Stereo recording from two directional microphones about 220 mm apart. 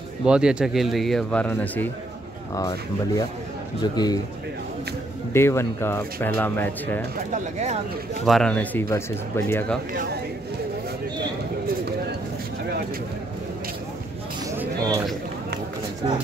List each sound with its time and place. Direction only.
0.2 s speech: 5° right (ahead or behind)
3.8 s a man's voice: 20° left (ahead or behind)
5.3 s speech: 10° left (ahead or behind)
7.2 s speech: 30° right (ahead or behind)
8.3 s speech: 5° left (ahead or behind)
14.5 s a sound: 10° right (ahead or behind)